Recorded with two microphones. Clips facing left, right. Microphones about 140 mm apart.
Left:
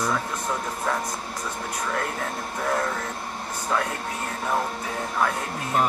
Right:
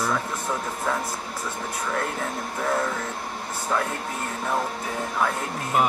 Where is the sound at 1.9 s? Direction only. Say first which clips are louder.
Right 2 dB; centre (ahead or behind).